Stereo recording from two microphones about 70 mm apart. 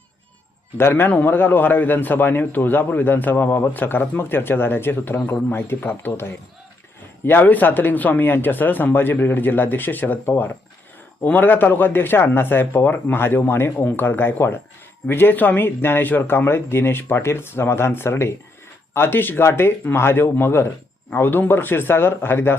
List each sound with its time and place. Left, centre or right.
0.8 s a man's voice: left